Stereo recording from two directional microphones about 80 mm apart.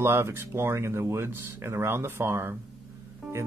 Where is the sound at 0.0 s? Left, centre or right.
Right.